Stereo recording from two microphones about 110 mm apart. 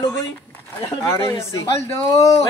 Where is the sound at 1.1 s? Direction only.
30° left (ahead or behind).